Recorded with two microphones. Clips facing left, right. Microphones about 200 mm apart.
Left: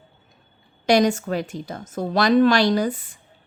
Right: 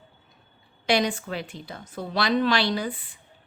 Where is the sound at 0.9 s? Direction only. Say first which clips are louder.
Left 6 dB; 45° left (ahead or behind).